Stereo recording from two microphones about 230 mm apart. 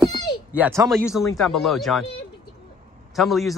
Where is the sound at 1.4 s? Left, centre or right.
Centre.